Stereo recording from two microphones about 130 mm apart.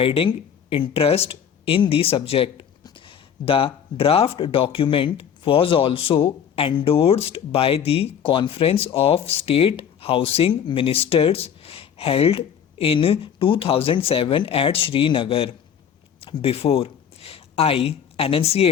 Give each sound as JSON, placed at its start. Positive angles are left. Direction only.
{"t": 0.0, "sound": "speech", "side_deg": 45}